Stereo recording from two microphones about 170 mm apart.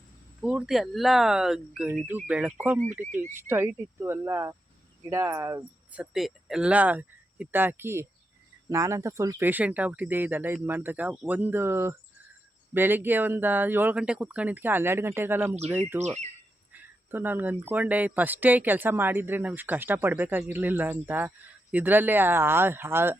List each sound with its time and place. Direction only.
0.4 s speech: 5° right (ahead or behind)
3.0 s speech: 45° right (ahead or behind)
3.3 s speech: 10° right (ahead or behind)
16.0 s speech: 40° right (ahead or behind)
17.1 s speech: 10° right (ahead or behind)